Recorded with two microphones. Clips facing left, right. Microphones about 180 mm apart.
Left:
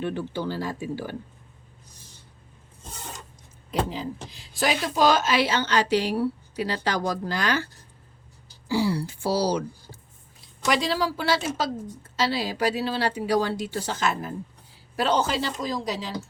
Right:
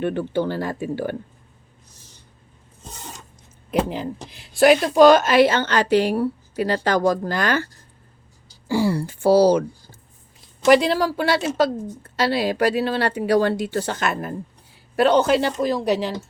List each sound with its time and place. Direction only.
0.0 s a woman's voice: 55° right (ahead or behind)
3.8 s speech: 60° right (ahead or behind)
10.7 s a woman's voice: 60° right (ahead or behind)